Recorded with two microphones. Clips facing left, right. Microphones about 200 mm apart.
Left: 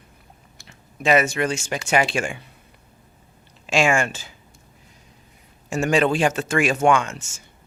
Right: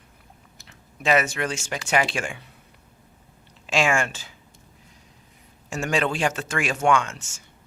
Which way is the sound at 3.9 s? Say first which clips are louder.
Left 3 dB; 15° left (ahead or behind).